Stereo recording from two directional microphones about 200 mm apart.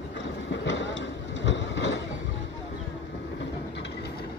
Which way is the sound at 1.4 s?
65° left (ahead or behind).